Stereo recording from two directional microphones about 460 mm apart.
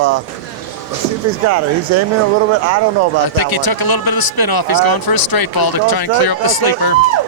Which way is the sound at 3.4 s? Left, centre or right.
Left.